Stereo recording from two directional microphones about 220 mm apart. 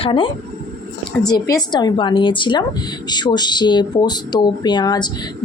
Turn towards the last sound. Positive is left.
turn(degrees=20)  # may be behind; listen again after turning